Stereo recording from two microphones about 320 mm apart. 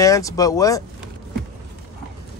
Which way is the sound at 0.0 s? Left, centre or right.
Centre.